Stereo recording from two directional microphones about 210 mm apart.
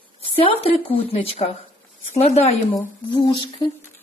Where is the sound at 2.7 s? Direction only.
20° left (ahead or behind).